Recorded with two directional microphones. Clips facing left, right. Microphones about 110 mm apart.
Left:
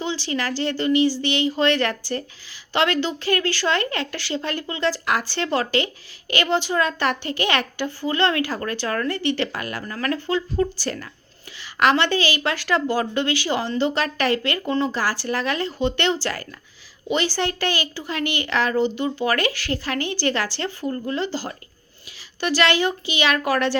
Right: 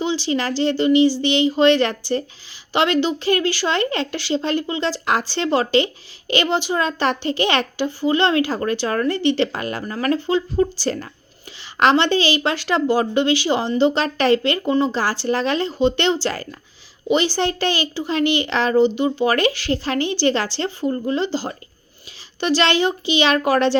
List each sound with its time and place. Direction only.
0.0 s a woman's voice: 20° right (ahead or behind)